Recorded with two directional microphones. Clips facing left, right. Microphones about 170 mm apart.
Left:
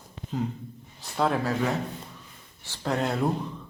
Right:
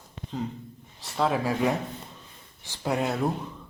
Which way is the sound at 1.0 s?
Centre (ahead or behind).